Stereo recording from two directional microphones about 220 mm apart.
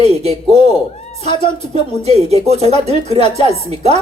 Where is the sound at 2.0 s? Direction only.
30° right (ahead or behind).